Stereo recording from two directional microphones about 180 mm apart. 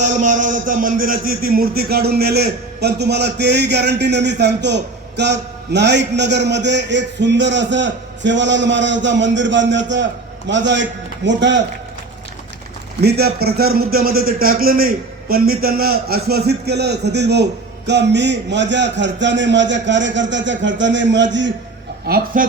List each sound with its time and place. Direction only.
0.1 s a man's voice: 45° right (ahead or behind); by 11.6 s 85° right
13.0 s a man's voice: 65° right (ahead or behind); by 21.2 s 85° right
22.0 s a man's voice: 55° right (ahead or behind)